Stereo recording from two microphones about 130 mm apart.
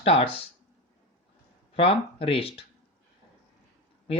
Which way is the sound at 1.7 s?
45° left (ahead or behind).